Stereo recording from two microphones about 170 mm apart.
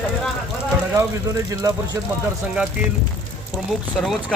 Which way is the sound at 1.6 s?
20° right (ahead or behind).